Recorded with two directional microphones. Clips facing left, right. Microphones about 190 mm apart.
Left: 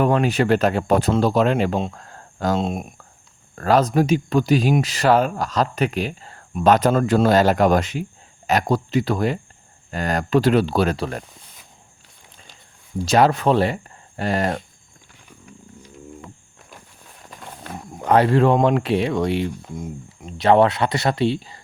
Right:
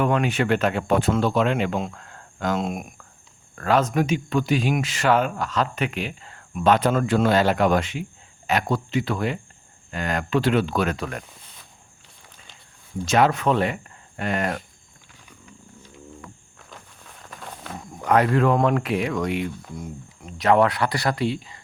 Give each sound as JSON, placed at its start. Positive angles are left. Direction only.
{"t": 0.0, "sound": "speech", "side_deg": 35}
{"t": 13.1, "sound": "speech", "side_deg": 35}
{"t": 17.9, "sound": "speech", "side_deg": 30}